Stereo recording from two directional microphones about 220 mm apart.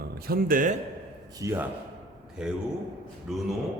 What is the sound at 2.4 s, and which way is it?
A man's voice, centre (ahead or behind).